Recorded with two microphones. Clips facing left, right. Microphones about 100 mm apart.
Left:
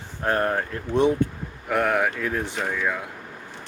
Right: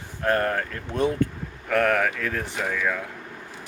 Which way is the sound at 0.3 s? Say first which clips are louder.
Even; 20° left (ahead or behind).